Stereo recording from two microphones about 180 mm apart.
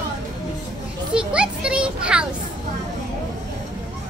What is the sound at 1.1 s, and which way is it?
A child's voice, 5° right (ahead or behind).